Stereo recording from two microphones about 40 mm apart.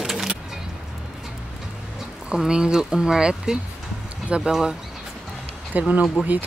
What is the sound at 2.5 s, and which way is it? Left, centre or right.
Speech, centre.